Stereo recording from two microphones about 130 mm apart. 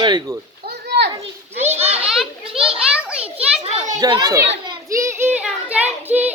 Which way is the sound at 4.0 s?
35° right (ahead or behind).